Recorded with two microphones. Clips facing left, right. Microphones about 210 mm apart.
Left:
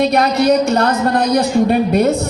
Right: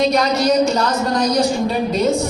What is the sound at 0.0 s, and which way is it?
Speech, 60° left (ahead or behind).